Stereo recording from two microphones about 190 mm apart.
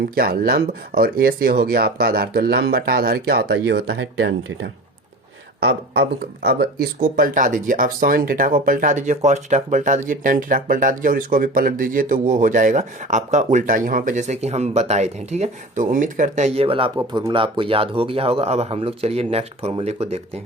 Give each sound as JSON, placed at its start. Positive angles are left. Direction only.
{"t": 0.1, "sound": "speech", "side_deg": -50}